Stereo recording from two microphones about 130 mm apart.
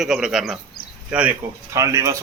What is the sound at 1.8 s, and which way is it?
Speech, 25° right (ahead or behind).